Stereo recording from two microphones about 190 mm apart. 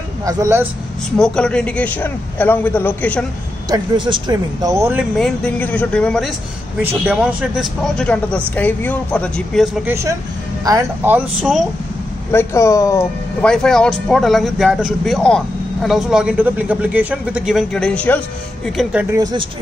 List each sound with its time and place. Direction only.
0.2 s speech: 15° right (ahead or behind)
1.1 s a man's voice: 5° left (ahead or behind)
3.7 s speech: 25° right (ahead or behind)
4.9 s speech: 5° left (ahead or behind)
6.8 s speech: 10° right (ahead or behind)
10.6 s speech: 15° right (ahead or behind)
12.3 s a man's voice: 15° left (ahead or behind)
13.5 s speech: 5° left (ahead or behind)
18.8 s speech: 5° right (ahead or behind)
19.1 s speech: 20° right (ahead or behind)